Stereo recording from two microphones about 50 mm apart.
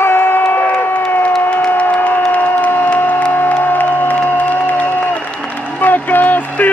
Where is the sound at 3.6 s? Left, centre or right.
Left.